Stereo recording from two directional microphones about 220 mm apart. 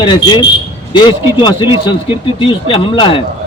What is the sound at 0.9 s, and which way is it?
A man's voice, 20° left (ahead or behind).